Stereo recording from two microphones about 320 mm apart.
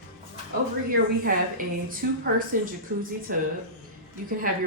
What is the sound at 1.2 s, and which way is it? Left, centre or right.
Speech, right.